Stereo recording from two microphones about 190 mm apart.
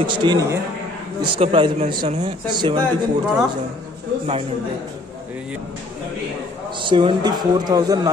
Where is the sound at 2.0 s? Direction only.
35° right (ahead or behind).